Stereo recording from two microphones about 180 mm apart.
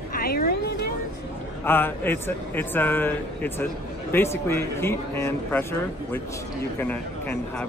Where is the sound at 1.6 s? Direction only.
10° left (ahead or behind).